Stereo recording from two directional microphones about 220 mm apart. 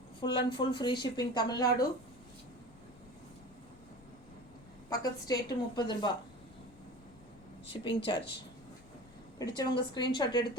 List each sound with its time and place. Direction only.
0.2 s a woman's voice: 20° left (ahead or behind)
4.9 s a woman's voice: 15° left (ahead or behind)
7.7 s a woman's voice: 20° left (ahead or behind)
9.6 s a woman's voice: 20° left (ahead or behind)